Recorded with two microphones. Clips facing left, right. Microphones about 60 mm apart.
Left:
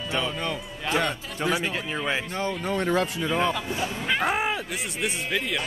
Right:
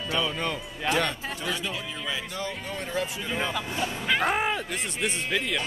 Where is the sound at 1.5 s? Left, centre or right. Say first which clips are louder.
Left 7 dB; left.